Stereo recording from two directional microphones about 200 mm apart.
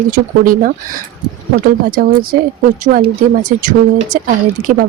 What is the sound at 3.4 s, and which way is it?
Speech, 40° right (ahead or behind).